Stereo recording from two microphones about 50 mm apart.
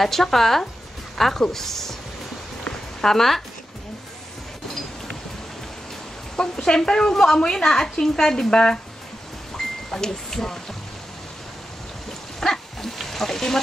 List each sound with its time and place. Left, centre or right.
0.0 s a woman's voice: centre
3.0 s a woman's voice: centre
6.3 s a woman's voice: centre
9.8 s speech: centre
12.4 s dog: centre